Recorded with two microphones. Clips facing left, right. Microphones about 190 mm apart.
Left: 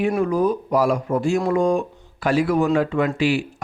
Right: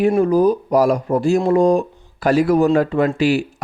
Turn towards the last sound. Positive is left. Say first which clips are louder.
# right 4 dB
turn(degrees=-40)  # may be behind; listen again after turning